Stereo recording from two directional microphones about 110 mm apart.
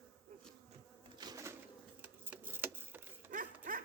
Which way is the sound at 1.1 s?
40° right (ahead or behind).